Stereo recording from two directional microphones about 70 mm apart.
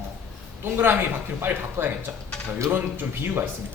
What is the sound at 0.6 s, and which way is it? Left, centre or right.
A man's voice, right.